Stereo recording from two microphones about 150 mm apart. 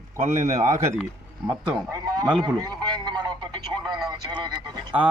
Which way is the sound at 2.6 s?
25° right (ahead or behind).